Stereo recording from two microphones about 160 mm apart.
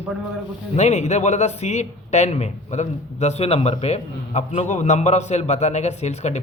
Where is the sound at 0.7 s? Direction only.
45° left (ahead or behind).